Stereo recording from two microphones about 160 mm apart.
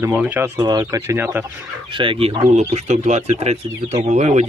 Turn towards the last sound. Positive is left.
turn(degrees=-45)  # may be behind; listen again after turning